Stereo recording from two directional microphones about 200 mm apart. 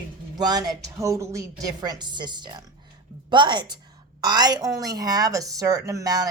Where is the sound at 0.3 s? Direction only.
20° right (ahead or behind).